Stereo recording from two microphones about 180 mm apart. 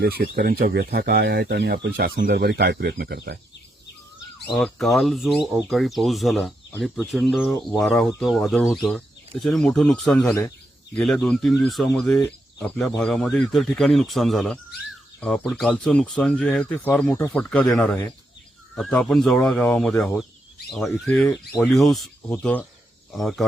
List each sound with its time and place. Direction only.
0.0 s speech: 60° right (ahead or behind)
4.5 s speech: centre (ahead or behind)